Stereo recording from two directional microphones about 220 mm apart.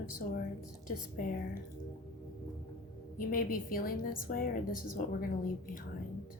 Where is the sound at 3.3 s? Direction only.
40° left (ahead or behind).